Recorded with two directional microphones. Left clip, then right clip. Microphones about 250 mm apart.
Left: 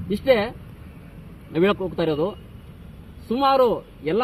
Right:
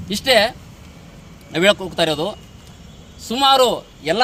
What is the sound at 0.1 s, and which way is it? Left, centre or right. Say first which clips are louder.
Speech: right 4 dB; right.